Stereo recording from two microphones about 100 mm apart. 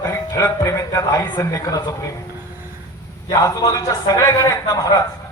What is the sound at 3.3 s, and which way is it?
Speech, 35° left (ahead or behind).